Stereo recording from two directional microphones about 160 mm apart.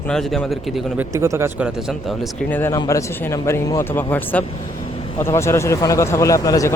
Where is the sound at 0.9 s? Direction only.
20° right (ahead or behind).